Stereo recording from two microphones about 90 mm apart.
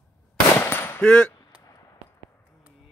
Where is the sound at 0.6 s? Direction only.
25° left (ahead or behind).